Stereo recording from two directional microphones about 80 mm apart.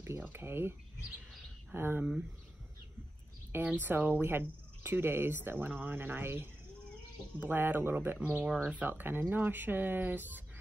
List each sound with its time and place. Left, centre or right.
0.2 s speech: right
3.5 s speech: right